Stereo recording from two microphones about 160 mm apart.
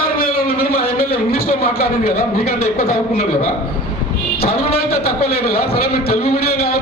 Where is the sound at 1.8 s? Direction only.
75° left (ahead or behind).